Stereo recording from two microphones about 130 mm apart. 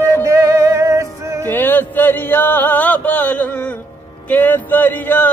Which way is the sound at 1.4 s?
15° left (ahead or behind).